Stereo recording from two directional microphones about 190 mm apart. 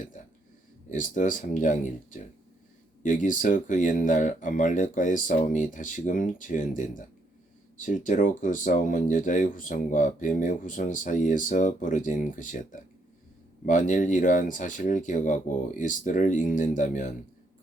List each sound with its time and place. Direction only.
0.9 s speech: 40° left (ahead or behind)